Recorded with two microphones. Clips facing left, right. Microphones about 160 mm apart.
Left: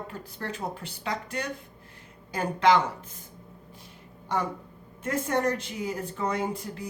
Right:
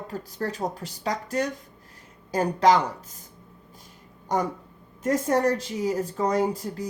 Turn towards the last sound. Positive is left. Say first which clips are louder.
# right 6 dB
turn(degrees=-40)  # may be behind; listen again after turning